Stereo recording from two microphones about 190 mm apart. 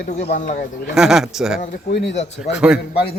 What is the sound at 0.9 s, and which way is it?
Speech, centre (ahead or behind).